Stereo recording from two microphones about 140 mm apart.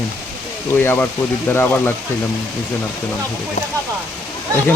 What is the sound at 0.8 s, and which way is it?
Speech, 15° left (ahead or behind).